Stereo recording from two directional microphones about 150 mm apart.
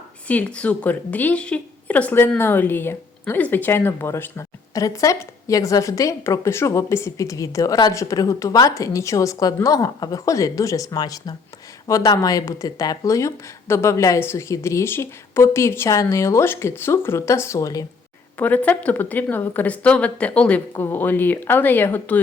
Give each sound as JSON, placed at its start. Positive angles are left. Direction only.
{"t": 0.3, "sound": "speech", "side_deg": 10}
{"t": 18.3, "sound": "speech", "side_deg": 10}